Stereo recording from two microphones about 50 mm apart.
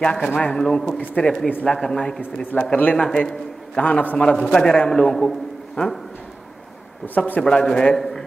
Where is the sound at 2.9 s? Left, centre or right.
Centre.